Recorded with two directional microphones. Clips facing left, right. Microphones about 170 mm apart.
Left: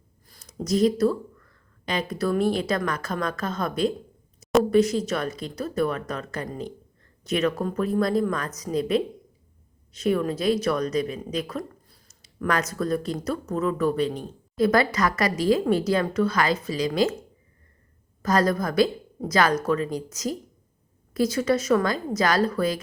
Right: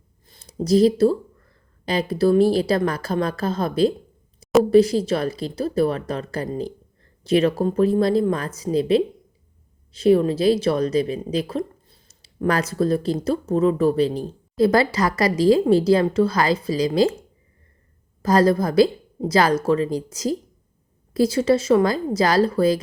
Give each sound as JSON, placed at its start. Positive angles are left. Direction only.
{"t": 0.3, "sound": "a woman's voice", "side_deg": -30}
{"t": 18.2, "sound": "a woman's voice", "side_deg": -30}